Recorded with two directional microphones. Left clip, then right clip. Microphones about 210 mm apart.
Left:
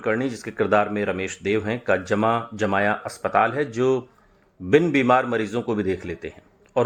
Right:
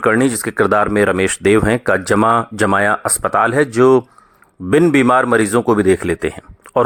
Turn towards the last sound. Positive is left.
turn(degrees=-35)  # may be behind; listen again after turning